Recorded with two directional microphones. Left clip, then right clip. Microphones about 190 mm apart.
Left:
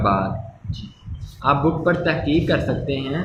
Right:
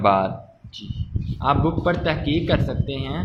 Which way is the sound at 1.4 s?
40° right (ahead or behind).